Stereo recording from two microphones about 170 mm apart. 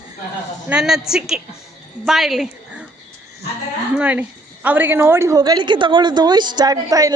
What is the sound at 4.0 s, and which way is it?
A woman's voice, 10° right (ahead or behind).